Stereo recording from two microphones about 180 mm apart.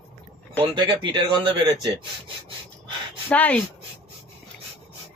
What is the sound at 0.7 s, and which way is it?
Speech, 25° right (ahead or behind).